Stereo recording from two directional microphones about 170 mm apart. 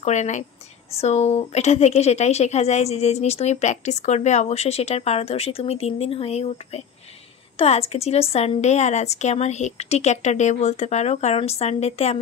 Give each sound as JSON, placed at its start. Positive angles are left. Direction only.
{"t": 0.0, "sound": "a woman's voice", "side_deg": 45}